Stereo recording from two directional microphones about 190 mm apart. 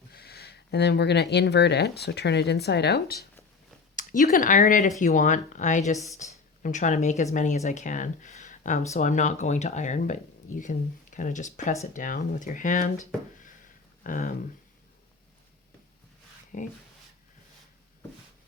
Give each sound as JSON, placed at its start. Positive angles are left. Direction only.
{"t": 0.1, "sound": "speech", "side_deg": 55}
{"t": 3.9, "sound": "speech", "side_deg": 45}
{"t": 14.0, "sound": "speech", "side_deg": 45}
{"t": 16.5, "sound": "speech", "side_deg": 45}